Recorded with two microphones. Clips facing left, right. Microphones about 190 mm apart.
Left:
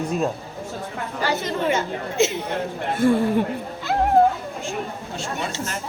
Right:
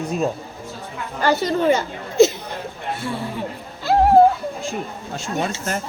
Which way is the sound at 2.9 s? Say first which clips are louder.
Left 10 dB; 50° left (ahead or behind).